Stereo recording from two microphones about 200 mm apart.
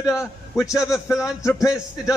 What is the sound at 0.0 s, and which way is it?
Speech, 15° left (ahead or behind).